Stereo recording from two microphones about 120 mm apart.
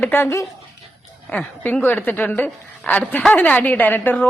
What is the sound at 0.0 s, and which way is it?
A woman's voice, 20° left (ahead or behind).